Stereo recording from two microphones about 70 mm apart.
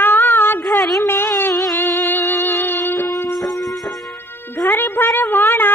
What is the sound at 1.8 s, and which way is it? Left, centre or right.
Music, left.